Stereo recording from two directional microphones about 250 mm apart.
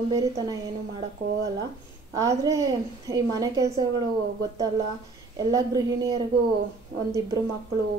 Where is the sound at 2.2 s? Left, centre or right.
Centre.